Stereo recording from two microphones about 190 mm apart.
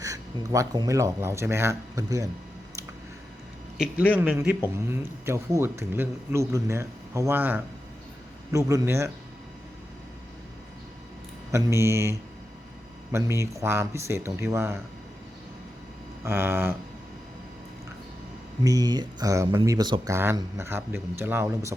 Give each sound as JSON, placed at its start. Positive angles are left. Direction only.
{"t": 0.0, "sound": "speech", "side_deg": -20}
{"t": 4.1, "sound": "speech", "side_deg": -10}
{"t": 11.5, "sound": "speech", "side_deg": -15}
{"t": 16.2, "sound": "speech", "side_deg": -10}
{"t": 18.6, "sound": "speech", "side_deg": -20}